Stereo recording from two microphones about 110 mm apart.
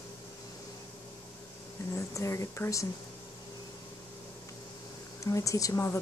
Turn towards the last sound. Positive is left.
turn(degrees=25)  # may be behind; listen again after turning